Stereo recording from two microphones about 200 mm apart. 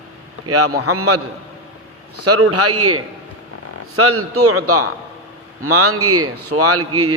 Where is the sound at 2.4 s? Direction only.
90° right.